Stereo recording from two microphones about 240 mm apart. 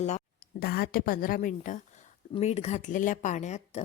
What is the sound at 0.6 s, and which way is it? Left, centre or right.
A woman's voice, left.